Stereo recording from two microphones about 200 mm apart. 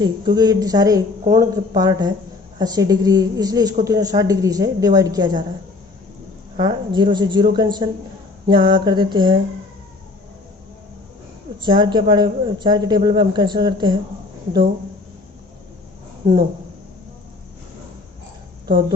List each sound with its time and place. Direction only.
0.0 s a woman's voice: 20° right (ahead or behind)
6.6 s a woman's voice: 20° right (ahead or behind)
11.6 s a woman's voice: 25° right (ahead or behind)
16.2 s speech: 20° right (ahead or behind)